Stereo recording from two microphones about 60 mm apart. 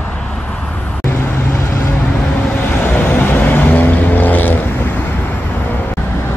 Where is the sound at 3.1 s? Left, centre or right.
Left.